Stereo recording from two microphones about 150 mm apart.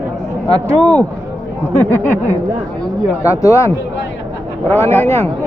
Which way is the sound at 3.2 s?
20° left (ahead or behind).